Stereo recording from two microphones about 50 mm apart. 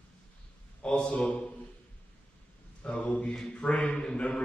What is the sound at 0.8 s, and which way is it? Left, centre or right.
Speech, centre.